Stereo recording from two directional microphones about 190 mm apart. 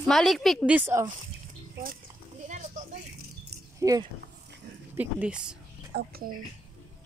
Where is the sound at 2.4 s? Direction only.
40° right (ahead or behind).